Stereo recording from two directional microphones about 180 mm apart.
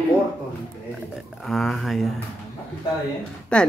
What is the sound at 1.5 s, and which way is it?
Speech, centre (ahead or behind).